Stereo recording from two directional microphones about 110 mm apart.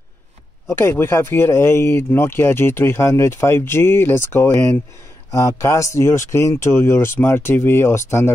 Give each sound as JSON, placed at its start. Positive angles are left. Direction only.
{"t": 0.7, "sound": "speech", "side_deg": 20}